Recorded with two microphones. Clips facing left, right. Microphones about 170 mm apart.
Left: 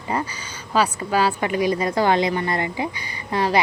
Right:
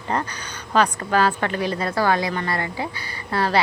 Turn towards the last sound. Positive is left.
turn(degrees=15)  # may be behind; listen again after turning